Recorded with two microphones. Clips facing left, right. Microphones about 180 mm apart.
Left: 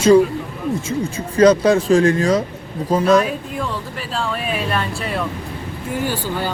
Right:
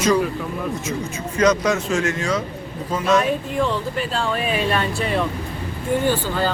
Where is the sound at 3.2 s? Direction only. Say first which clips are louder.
Right 3 dB; centre (ahead or behind).